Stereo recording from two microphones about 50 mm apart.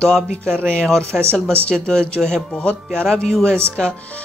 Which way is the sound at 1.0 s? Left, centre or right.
Right.